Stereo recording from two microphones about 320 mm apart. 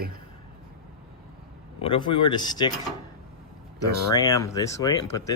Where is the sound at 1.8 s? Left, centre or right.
Centre.